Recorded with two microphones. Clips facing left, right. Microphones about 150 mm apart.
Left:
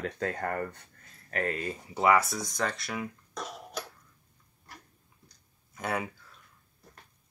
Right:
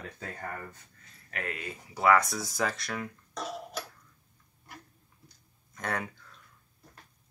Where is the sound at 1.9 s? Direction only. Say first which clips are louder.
Even; 20° left (ahead or behind).